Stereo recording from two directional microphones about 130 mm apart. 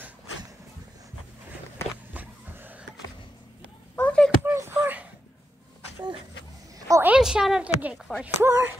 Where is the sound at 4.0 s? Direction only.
10° left (ahead or behind).